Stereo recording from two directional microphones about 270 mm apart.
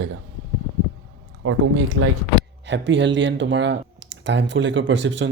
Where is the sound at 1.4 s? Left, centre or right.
Right.